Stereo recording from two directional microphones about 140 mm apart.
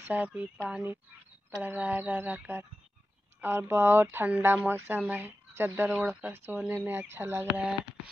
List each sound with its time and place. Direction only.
0.1 s speech: 10° right (ahead or behind)